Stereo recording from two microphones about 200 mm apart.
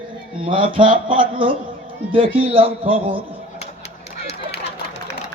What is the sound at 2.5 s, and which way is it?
Speech, 25° right (ahead or behind).